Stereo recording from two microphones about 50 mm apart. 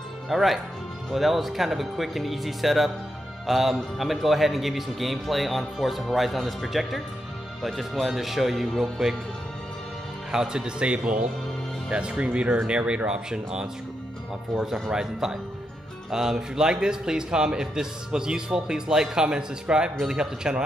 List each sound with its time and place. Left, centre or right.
0.3 s speech: centre
10.3 s speech: centre